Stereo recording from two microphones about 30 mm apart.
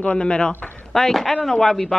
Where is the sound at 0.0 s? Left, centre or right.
Left.